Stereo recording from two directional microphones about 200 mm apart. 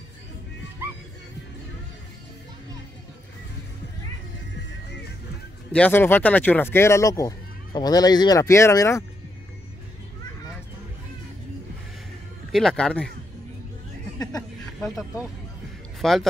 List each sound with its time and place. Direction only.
5.7 s speech: 10° left (ahead or behind)
12.5 s speech: 5° left (ahead or behind)
14.8 s speech: centre (ahead or behind)